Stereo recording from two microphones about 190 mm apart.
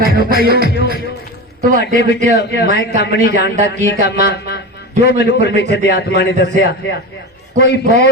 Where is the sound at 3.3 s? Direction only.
40° right (ahead or behind).